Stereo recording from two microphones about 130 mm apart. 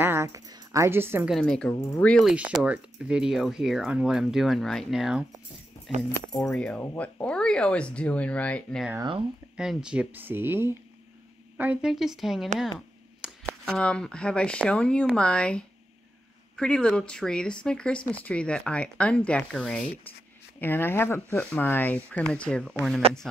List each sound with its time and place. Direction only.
0.0 s speech: 20° right (ahead or behind)
1.3 s speech: 5° left (ahead or behind)
2.2 s speech: 5° right (ahead or behind); by 8.8 s 10° left (ahead or behind)
9.6 s speech: 5° right (ahead or behind)
12.5 s a sound: centre (ahead or behind)
13.7 s speech: 5° left (ahead or behind)
20.6 s speech: 15° left (ahead or behind)